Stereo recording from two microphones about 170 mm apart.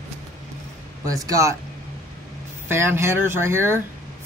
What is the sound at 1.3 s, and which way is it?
Speech, 20° right (ahead or behind).